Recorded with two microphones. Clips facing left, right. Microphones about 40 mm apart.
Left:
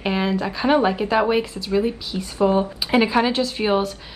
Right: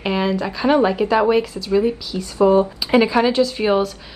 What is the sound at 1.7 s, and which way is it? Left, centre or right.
Speech, left.